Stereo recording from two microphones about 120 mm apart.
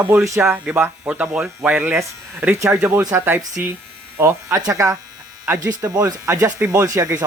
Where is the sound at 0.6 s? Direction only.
10° right (ahead or behind).